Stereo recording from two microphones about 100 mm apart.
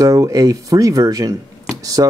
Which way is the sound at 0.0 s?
35° right (ahead or behind).